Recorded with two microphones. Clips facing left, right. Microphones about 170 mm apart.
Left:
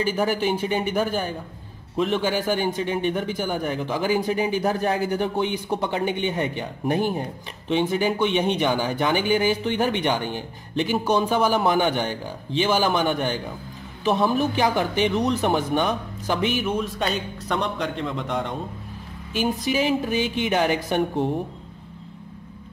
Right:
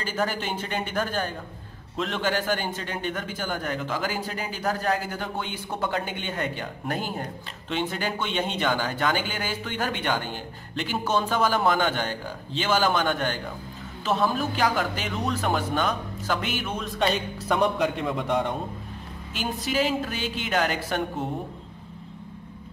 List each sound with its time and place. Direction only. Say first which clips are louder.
0.0 s speech: left 6 dB; 15° left (ahead or behind); by 18.5 s 5° right (ahead or behind)
19.6 s speech: right 1 dB; 15° left (ahead or behind)